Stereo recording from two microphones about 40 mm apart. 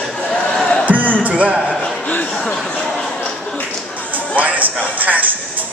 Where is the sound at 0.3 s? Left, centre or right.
Centre.